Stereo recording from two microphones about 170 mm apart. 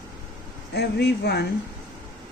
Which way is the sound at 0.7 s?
75° left (ahead or behind).